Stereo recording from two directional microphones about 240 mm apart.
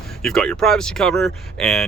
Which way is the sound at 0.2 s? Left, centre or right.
Centre.